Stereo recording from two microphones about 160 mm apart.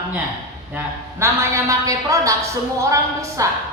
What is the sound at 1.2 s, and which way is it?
A woman's voice, 20° right (ahead or behind).